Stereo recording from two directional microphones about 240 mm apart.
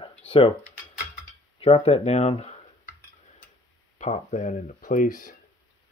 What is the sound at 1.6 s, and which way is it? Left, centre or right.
Speech, left.